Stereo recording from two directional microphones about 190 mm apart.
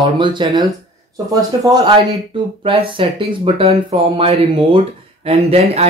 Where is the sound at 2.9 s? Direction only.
30° right (ahead or behind).